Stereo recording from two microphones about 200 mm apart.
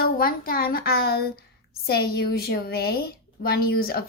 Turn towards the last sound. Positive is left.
turn(degrees=50)  # may be behind; listen again after turning